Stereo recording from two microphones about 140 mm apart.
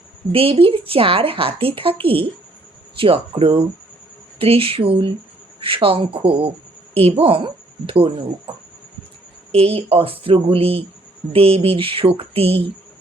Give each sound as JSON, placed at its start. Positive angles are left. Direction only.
{"t": 0.3, "sound": "a woman's voice", "side_deg": -40}
{"t": 9.6, "sound": "a woman's voice", "side_deg": -45}